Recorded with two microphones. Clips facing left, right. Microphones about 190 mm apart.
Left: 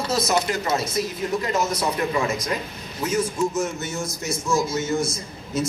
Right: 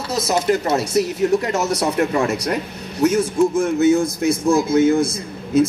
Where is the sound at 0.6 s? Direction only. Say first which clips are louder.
Right 6 dB; 70° right (ahead or behind).